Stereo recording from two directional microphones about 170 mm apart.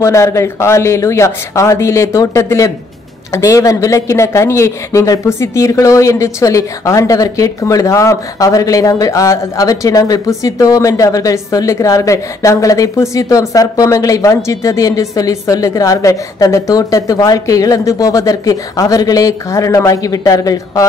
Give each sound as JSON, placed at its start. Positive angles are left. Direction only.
{"t": 0.0, "sound": "speech", "side_deg": 15}